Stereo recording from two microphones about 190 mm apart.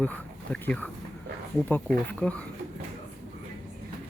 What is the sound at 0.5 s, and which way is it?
Speech, 5° left (ahead or behind).